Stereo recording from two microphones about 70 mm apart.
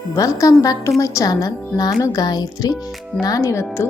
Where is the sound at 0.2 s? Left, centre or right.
Left.